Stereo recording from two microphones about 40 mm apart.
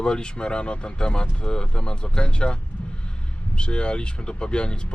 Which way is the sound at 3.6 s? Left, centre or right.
Left.